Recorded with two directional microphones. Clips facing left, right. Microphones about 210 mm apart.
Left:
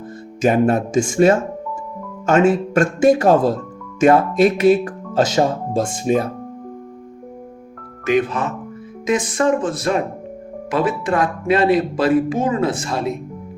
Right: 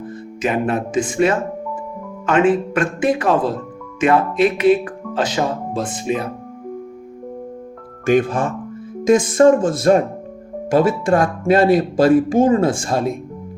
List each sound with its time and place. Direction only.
0.4 s speech: 45° left (ahead or behind)
8.0 s speech: 50° right (ahead or behind)